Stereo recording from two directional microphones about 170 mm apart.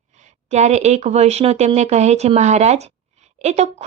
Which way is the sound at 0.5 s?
40° right (ahead or behind).